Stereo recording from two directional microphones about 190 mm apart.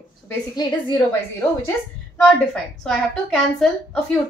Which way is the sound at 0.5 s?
25° left (ahead or behind).